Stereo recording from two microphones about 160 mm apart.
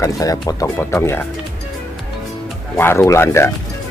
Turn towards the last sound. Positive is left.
turn(degrees=15)  # may be behind; listen again after turning